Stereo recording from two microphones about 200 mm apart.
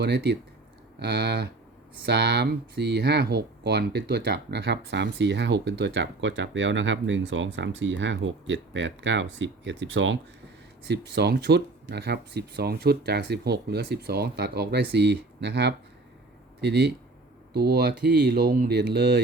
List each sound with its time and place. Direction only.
0.0 s speech: 55° right (ahead or behind)